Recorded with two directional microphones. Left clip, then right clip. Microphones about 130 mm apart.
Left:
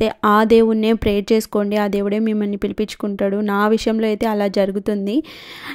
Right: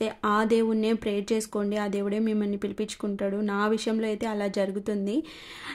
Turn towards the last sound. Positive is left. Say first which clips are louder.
# left 9 dB
turn(degrees=65)  # may be behind; listen again after turning